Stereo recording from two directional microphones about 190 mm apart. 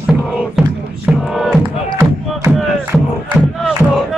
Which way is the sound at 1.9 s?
15° right (ahead or behind).